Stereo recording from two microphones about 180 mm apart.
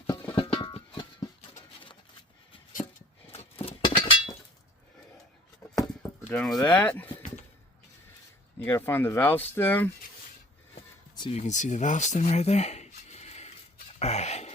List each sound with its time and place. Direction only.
0.1 s music: 15° left (ahead or behind)
0.3 s music: 30° left (ahead or behind)
3.3 s a sound: 35° left (ahead or behind)
6.0 s chop: 10° left (ahead or behind)
6.7 s speech: 10° left (ahead or behind)
8.5 s speech: 15° left (ahead or behind)
11.1 s a sound: 25° left (ahead or behind)
11.3 s speech: 40° left (ahead or behind)
14.0 s a sound: 35° left (ahead or behind)